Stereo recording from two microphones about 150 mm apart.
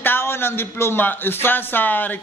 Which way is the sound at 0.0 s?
15° left (ahead or behind).